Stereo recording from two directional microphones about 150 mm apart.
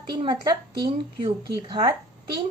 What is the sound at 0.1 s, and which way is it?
Speech, 30° right (ahead or behind).